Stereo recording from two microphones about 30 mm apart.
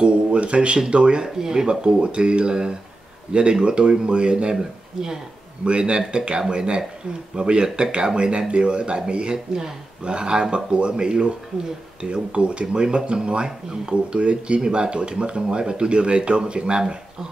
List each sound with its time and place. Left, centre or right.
0.0 s a sound: right
0.8 s speech: right
1.2 s speech: right
1.7 s speech: right
4.6 s speech: centre
5.7 s speech: right